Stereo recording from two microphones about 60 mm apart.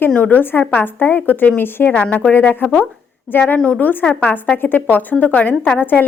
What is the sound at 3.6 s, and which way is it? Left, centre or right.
A woman's voice, left.